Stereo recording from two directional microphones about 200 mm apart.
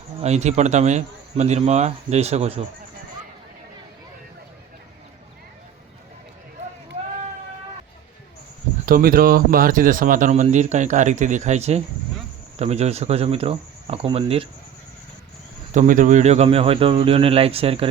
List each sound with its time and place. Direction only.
0.2 s speech: 35° right (ahead or behind)
8.9 s speech: 45° right (ahead or behind); by 14.4 s 30° right (ahead or behind)
15.7 s speech: 40° right (ahead or behind)